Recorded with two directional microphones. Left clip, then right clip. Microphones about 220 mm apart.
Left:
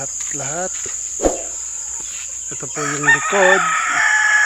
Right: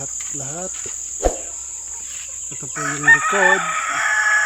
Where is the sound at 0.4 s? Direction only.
5° left (ahead or behind).